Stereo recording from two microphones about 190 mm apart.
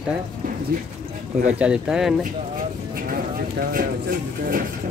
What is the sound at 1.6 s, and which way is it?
Speech, 5° right (ahead or behind).